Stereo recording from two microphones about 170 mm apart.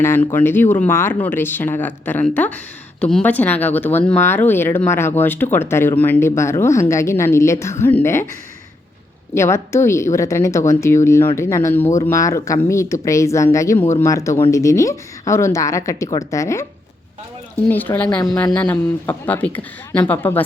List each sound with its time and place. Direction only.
0.0 s speech: 15° left (ahead or behind)
9.3 s speech: 15° left (ahead or behind)
17.7 s speech: 10° left (ahead or behind)